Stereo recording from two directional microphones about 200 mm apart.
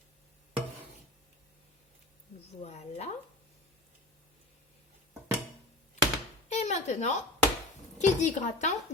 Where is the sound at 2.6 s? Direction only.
35° left (ahead or behind).